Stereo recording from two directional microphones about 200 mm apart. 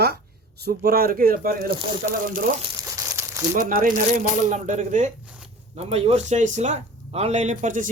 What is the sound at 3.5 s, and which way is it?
Speech, 45° right (ahead or behind).